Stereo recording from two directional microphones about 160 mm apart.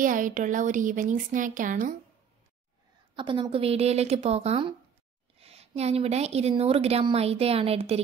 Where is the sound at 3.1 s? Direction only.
30° right (ahead or behind).